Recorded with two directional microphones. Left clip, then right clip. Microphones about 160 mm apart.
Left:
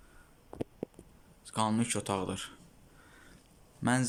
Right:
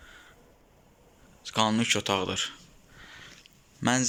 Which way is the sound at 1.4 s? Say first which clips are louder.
Right 7 dB; 5° left (ahead or behind).